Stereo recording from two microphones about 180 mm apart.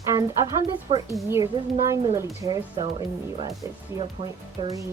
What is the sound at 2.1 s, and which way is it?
Speech, 15° right (ahead or behind).